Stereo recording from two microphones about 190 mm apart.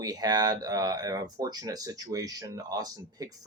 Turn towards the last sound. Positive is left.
turn(degrees=-20)  # may be behind; listen again after turning